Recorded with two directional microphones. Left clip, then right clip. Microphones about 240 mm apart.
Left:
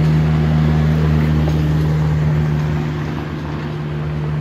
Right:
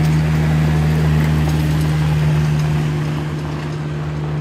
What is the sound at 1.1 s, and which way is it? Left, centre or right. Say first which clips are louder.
Vehicle: left 1 dB; right.